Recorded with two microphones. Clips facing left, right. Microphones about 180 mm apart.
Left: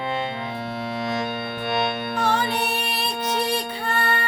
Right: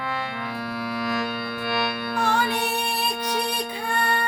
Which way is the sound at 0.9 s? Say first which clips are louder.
Left 1 dB; 25° left (ahead or behind).